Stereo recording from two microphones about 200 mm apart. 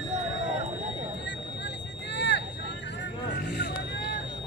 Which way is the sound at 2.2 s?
60° left (ahead or behind).